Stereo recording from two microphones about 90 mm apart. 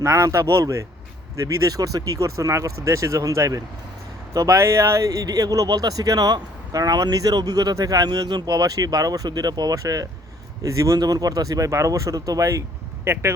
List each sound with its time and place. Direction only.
0.0 s speech: 35° right (ahead or behind)